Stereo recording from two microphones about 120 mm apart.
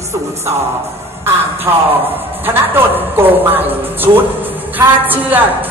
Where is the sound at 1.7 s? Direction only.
25° right (ahead or behind).